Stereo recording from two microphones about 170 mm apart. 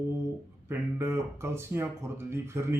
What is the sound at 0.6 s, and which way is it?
Speech, 15° right (ahead or behind).